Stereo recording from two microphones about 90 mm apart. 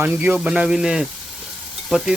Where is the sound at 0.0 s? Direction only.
25° right (ahead or behind).